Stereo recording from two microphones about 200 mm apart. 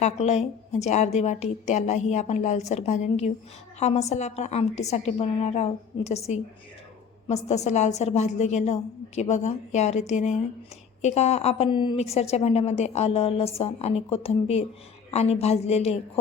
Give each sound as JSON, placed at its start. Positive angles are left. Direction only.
{"t": 0.0, "sound": "a woman's voice", "side_deg": 35}